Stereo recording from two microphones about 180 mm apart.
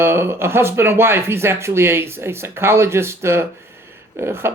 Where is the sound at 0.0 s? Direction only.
15° right (ahead or behind).